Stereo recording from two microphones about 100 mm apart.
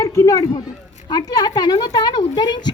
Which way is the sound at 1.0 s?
45° left (ahead or behind).